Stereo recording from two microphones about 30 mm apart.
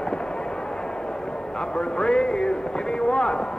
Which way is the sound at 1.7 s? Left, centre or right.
Left.